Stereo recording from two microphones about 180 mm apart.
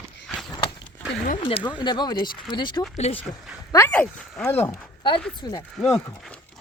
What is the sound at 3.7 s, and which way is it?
Speech, 10° left (ahead or behind).